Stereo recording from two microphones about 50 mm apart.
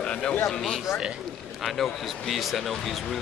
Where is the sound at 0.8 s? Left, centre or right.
Centre.